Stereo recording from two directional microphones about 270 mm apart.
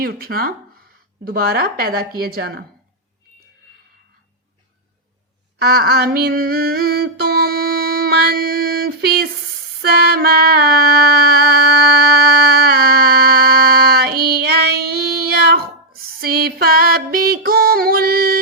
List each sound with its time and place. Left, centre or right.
0.0 s a woman's voice: right
5.5 s a sound: right
9.8 s music: right